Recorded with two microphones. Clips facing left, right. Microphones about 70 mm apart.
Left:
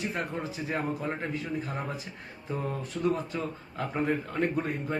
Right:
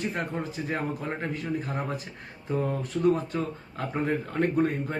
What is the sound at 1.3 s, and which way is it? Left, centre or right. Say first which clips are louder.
Speech: right 2 dB; right.